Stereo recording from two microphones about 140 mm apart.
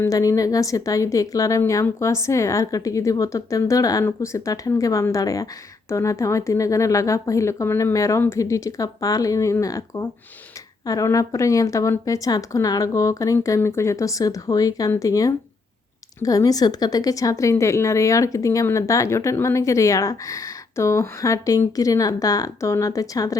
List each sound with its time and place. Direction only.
0.0 s a woman's voice: 25° left (ahead or behind)